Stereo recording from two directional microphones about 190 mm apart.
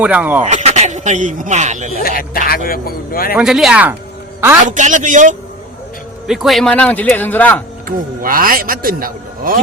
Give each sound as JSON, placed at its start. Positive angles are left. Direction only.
{"t": 0.0, "sound": "speech", "side_deg": -10}
{"t": 0.4, "sound": "speech", "side_deg": -35}
{"t": 2.0, "sound": "speech", "side_deg": 50}
{"t": 3.3, "sound": "speech", "side_deg": 0}
{"t": 4.6, "sound": "a man's voice", "side_deg": -40}
{"t": 6.2, "sound": "a man's voice", "side_deg": 0}
{"t": 7.9, "sound": "a man's voice", "side_deg": -45}